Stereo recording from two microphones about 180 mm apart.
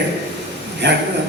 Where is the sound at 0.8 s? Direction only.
75° right (ahead or behind).